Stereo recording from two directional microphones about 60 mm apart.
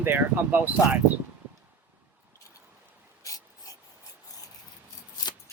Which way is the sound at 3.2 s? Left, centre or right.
Left.